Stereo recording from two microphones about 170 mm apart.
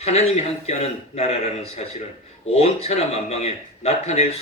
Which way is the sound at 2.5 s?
35° left (ahead or behind).